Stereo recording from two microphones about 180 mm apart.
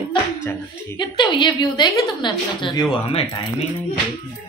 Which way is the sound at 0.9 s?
25° left (ahead or behind).